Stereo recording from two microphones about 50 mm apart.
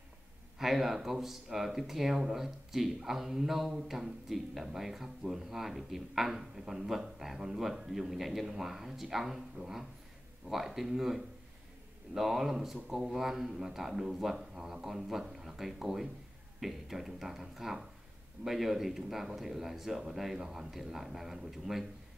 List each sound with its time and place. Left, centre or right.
0.6 s speech: centre